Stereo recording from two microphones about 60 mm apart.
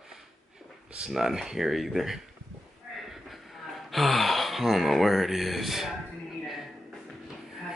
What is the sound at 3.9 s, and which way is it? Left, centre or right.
Speech, centre.